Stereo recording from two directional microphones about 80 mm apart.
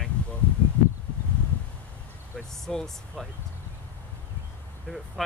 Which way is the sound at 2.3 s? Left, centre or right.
Centre.